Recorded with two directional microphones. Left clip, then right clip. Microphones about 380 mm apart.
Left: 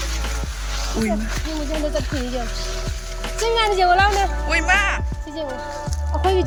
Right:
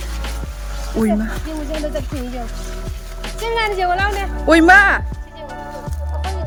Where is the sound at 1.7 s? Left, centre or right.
Centre.